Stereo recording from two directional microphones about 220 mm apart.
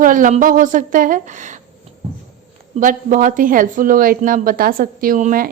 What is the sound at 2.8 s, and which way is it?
Speech, 35° right (ahead or behind).